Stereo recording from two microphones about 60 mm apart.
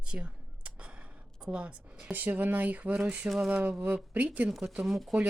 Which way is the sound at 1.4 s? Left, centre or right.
Centre.